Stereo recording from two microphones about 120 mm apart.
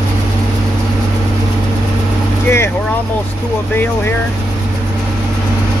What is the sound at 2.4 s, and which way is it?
Speech, 20° left (ahead or behind).